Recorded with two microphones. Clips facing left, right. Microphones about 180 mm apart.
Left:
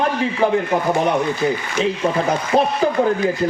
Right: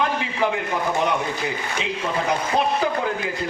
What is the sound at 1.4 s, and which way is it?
Speech, 40° left (ahead or behind).